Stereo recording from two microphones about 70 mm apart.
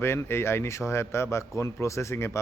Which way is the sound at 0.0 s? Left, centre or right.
Left.